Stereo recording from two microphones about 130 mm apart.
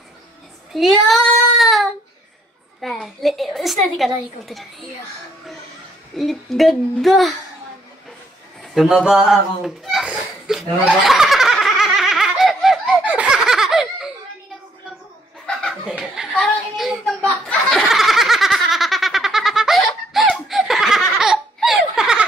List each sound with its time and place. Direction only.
0.7 s child singing: centre (ahead or behind)
2.8 s a woman's voice: centre (ahead or behind)
6.1 s a woman's voice: centre (ahead or behind)
8.7 s a sound: 5° right (ahead or behind)
15.4 s chuckle: 5° left (ahead or behind)
16.0 s a sound: centre (ahead or behind)